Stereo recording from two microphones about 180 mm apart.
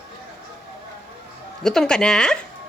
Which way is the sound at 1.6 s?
5° left (ahead or behind).